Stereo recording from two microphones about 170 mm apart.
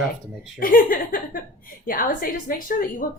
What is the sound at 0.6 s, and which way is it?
Speech, 55° left (ahead or behind).